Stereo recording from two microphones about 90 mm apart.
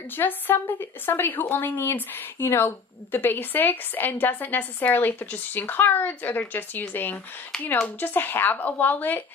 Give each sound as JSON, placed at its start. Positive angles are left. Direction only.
{"t": 0.1, "sound": "a woman's voice", "side_deg": 20}